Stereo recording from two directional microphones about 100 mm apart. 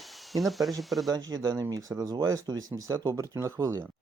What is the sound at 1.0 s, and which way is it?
Speech, 40° right (ahead or behind).